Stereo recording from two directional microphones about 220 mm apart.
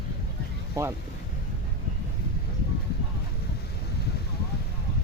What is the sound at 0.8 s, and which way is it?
Speech, 15° right (ahead or behind).